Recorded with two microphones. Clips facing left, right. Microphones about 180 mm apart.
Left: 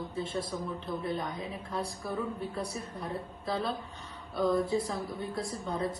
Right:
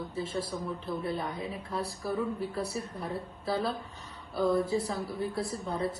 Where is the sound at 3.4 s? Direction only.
5° right (ahead or behind).